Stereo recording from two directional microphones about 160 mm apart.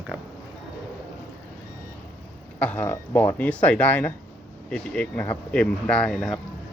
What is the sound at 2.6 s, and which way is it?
Speech, 10° left (ahead or behind).